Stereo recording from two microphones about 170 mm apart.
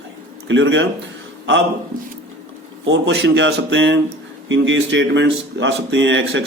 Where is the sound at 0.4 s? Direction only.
90° right.